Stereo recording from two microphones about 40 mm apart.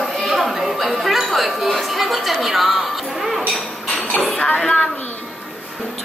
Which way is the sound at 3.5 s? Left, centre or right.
Left.